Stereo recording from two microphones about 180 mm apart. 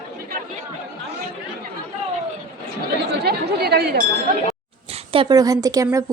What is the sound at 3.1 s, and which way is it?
Speech, 65° right (ahead or behind).